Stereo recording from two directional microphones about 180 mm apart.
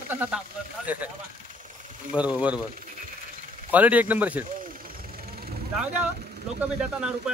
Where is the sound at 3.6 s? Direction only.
10° right (ahead or behind).